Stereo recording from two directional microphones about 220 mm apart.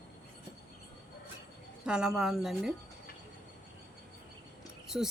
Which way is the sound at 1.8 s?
5° right (ahead or behind).